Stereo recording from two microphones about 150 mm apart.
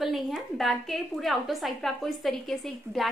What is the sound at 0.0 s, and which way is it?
A woman's voice, centre (ahead or behind).